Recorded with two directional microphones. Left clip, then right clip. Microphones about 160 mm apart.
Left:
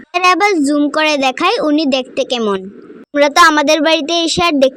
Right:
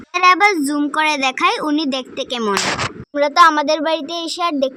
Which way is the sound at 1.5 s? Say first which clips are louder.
Left 6 dB; 40° left (ahead or behind).